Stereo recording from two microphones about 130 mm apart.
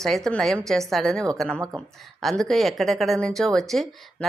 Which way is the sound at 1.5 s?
15° right (ahead or behind).